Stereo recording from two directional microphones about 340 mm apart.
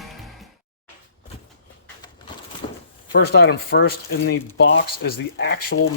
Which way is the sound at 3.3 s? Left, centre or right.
Left.